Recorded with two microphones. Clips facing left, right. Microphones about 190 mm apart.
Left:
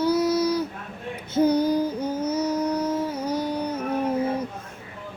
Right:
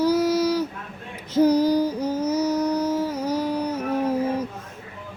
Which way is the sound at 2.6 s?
10° right (ahead or behind).